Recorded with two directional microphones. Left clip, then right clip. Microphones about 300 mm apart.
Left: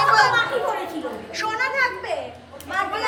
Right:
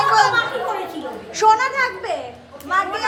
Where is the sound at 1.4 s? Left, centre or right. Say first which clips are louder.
Right 7 dB; centre.